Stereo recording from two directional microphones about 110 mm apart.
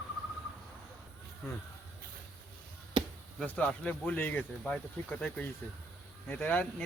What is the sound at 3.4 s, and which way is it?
Speech, 15° left (ahead or behind).